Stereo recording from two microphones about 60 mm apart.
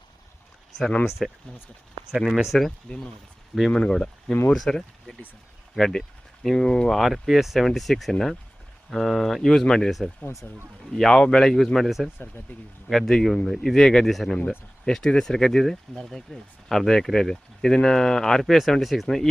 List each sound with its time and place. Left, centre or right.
0.8 s speech: centre
2.0 s speech: centre
2.9 s speech: centre
6.9 s speech: centre
10.9 s speech: centre
12.1 s speech: left
12.9 s speech: centre
14.8 s speech: centre